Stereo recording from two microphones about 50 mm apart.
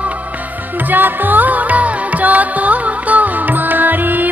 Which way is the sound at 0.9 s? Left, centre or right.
Right.